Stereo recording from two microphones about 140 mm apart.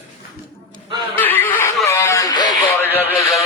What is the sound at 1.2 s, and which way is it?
Snicker, 15° left (ahead or behind).